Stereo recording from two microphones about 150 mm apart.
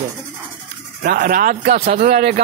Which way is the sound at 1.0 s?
75° right (ahead or behind).